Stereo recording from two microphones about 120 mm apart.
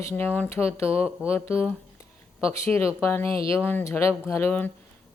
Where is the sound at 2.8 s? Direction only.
20° left (ahead or behind).